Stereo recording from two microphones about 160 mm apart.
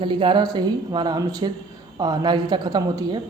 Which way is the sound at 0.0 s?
30° right (ahead or behind).